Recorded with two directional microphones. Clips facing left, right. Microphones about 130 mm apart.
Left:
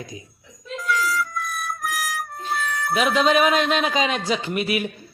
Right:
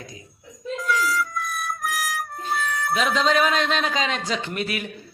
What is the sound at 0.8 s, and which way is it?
Music, centre (ahead or behind).